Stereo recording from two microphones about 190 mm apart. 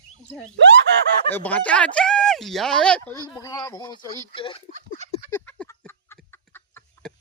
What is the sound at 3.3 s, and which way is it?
Speech, 15° left (ahead or behind).